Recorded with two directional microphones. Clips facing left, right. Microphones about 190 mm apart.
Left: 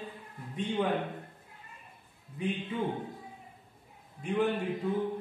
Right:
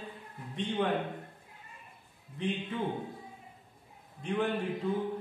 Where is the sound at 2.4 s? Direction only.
10° left (ahead or behind).